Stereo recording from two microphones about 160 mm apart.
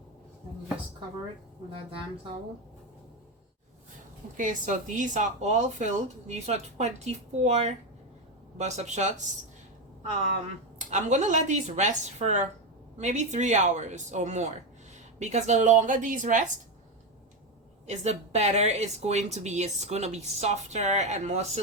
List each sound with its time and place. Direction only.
4.4 s speech: 50° right (ahead or behind)
10.8 s speech: 45° right (ahead or behind)
17.8 s speech: 45° right (ahead or behind)